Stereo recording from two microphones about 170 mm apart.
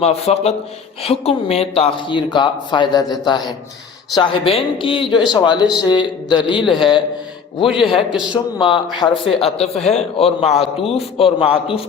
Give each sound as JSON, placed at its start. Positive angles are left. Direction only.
{"t": 0.0, "sound": "a man's voice", "side_deg": 40}
{"t": 7.7, "sound": "a man's voice", "side_deg": 0}
{"t": 8.3, "sound": "a man's voice", "side_deg": 30}